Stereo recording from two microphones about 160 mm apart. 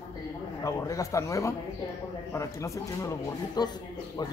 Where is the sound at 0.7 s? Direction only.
20° left (ahead or behind).